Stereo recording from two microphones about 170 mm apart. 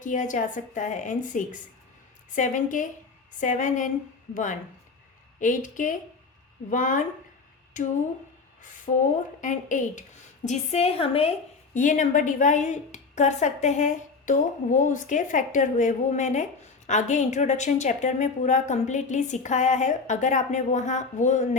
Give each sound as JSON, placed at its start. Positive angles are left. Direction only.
{"t": 0.0, "sound": "a woman's voice", "side_deg": 50}
{"t": 5.4, "sound": "a woman's voice", "side_deg": 50}
{"t": 8.9, "sound": "a woman's voice", "side_deg": 40}